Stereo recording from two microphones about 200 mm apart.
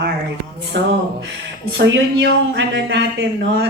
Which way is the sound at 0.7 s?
65° right (ahead or behind).